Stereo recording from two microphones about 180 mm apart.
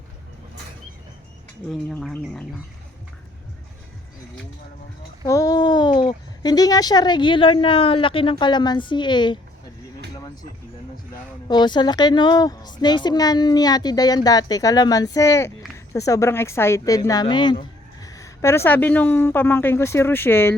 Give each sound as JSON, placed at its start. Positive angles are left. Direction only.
{"t": 1.7, "sound": "speech", "side_deg": 5}
{"t": 5.2, "sound": "speech", "side_deg": 20}
{"t": 11.4, "sound": "speech", "side_deg": 25}